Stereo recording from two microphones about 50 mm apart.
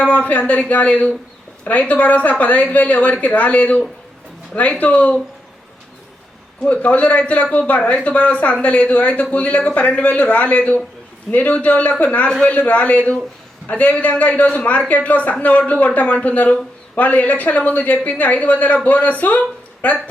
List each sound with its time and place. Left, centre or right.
0.0 s a man's voice: left
6.7 s a man's voice: left